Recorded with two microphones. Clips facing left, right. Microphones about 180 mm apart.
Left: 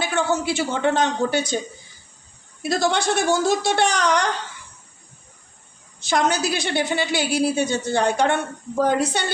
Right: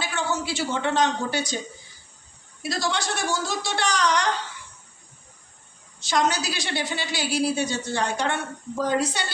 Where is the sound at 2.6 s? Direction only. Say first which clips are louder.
Left 6 dB; 55° left (ahead or behind).